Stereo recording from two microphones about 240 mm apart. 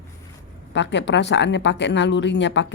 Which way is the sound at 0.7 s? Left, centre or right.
Left.